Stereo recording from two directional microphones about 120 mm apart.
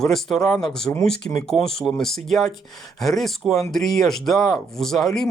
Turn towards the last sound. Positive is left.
turn(degrees=0)  # may be behind; listen again after turning